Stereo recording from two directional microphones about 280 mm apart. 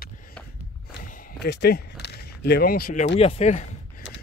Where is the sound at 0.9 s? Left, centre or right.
Left.